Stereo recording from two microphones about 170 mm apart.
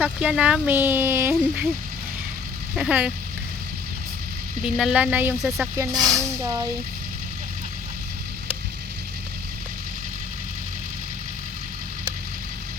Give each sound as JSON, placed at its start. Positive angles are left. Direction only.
{"t": 0.0, "sound": "speech", "side_deg": -10}
{"t": 2.7, "sound": "speech", "side_deg": -5}
{"t": 4.6, "sound": "speech", "side_deg": -5}
{"t": 5.7, "sound": "speech", "side_deg": -20}